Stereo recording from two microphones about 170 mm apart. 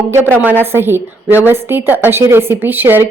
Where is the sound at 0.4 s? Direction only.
10° right (ahead or behind).